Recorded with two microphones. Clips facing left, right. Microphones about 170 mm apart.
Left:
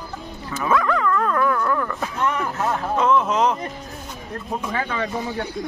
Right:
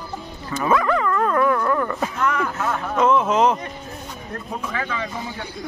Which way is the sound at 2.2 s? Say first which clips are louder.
Left 1 dB; 30° left (ahead or behind).